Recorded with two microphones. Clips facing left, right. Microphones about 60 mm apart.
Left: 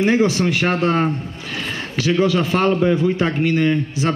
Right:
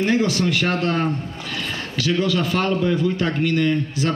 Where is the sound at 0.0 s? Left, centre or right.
Left.